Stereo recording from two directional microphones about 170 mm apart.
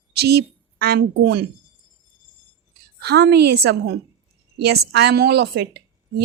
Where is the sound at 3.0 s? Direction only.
70° right (ahead or behind).